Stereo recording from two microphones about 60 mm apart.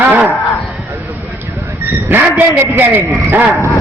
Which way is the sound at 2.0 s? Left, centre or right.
Right.